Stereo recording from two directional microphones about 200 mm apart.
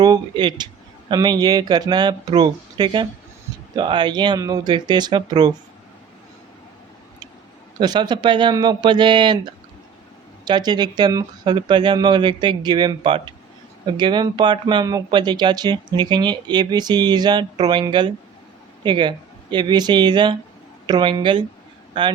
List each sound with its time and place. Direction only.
0.0 s speech: 20° right (ahead or behind)
7.8 s speech: 20° right (ahead or behind)